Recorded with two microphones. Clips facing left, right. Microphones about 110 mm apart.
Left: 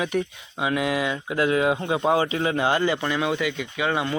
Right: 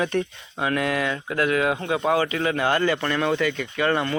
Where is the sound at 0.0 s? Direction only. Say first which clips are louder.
Right 1 dB; 5° left (ahead or behind).